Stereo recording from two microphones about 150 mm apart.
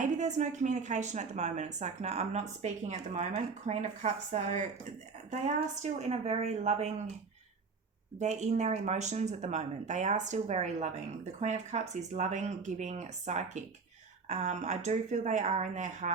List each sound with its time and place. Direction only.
0.0 s a woman's voice: 50° right (ahead or behind)
8.2 s a woman's voice: 50° right (ahead or behind)